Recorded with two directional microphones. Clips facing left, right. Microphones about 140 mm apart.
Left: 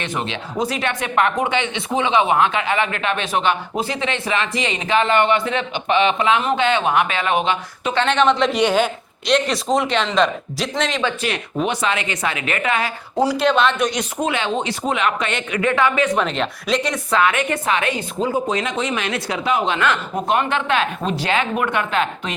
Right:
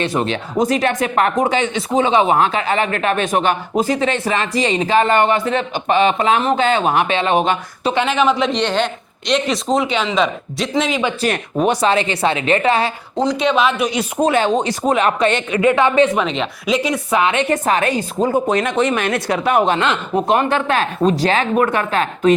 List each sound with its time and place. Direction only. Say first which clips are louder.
0.0 s speech: right 6 dB; 35° right (ahead or behind)
0.3 s speech: right 6 dB; 45° right (ahead or behind)
7.4 s speech: right 3 dB; 45° right (ahead or behind)
7.9 s speech: even; 5° right (ahead or behind)
8.5 s speech: left 1 dB; 10° left (ahead or behind)
11.2 s speech: right 5 dB; 45° right (ahead or behind)
13.1 s speech: even; 5° left (ahead or behind)
14.2 s speech: right 7 dB; 40° right (ahead or behind)
15.6 s a woman's voice: right 5 dB; 20° right (ahead or behind)
16.1 s speech: right 1 dB; centre (ahead or behind)
17.1 s a woman's voice: right 1 dB; 20° right (ahead or behind)
17.5 s speech: right 4 dB; 40° right (ahead or behind)
18.4 s speech: right 5 dB; 55° right (ahead or behind)
20.2 s speech: right 2 dB; 35° right (ahead or behind)